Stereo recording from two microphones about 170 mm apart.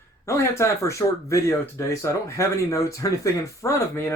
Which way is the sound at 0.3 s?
15° left (ahead or behind).